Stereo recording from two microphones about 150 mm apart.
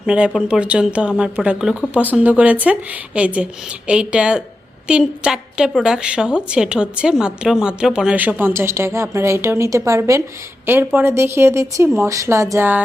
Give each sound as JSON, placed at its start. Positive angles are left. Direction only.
{"t": 0.0, "sound": "a woman's voice", "side_deg": -5}